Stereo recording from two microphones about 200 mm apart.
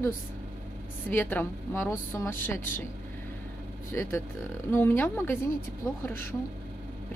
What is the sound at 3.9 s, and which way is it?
A woman's voice, 15° left (ahead or behind).